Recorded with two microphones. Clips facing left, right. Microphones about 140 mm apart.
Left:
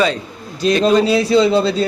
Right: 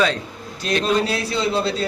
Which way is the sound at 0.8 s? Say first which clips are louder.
Left 8 dB; 90° left.